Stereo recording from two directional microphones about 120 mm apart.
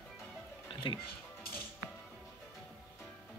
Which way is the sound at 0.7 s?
45° left (ahead or behind).